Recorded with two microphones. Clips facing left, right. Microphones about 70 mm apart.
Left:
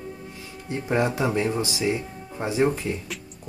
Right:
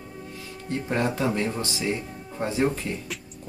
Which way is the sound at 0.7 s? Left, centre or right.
Centre.